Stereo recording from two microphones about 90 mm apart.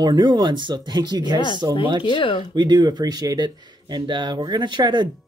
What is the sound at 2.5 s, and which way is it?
Speech, 55° right (ahead or behind).